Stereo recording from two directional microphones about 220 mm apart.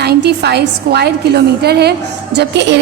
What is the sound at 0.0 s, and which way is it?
A woman's voice, 50° right (ahead or behind).